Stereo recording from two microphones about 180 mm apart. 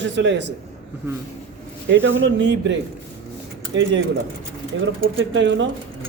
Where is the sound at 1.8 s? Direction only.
90° right.